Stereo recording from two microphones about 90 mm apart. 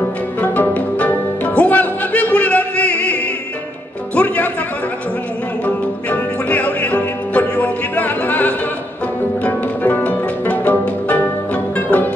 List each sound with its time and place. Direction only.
0.4 s music: 20° left (ahead or behind)
6.0 s music: 20° left (ahead or behind)